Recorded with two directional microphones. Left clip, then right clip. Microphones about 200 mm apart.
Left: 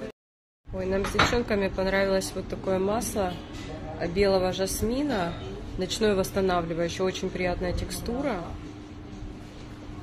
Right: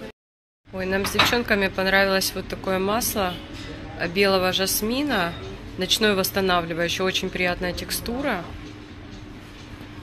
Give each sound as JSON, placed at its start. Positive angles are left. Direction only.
{"t": 0.7, "sound": "speech", "side_deg": -5}